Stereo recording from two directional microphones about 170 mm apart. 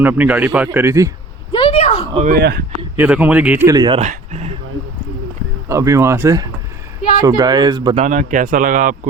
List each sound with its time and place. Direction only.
0.0 s a man's voice: 10° right (ahead or behind)
1.5 s a sound: 35° left (ahead or behind)
2.3 s speech: 70° right (ahead or behind)
2.9 s a man's voice: 10° right (ahead or behind)
3.9 s speech: 40° right (ahead or behind)
5.6 s a man's voice: 15° right (ahead or behind)
7.9 s a man's voice: 45° right (ahead or behind)